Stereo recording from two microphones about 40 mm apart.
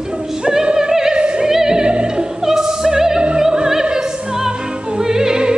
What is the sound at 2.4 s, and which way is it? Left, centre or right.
Opera, centre.